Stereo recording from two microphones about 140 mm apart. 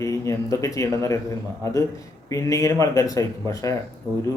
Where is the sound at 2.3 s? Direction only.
25° left (ahead or behind).